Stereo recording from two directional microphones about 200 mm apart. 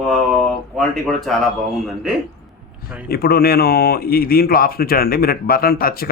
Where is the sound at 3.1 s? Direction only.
50° left (ahead or behind).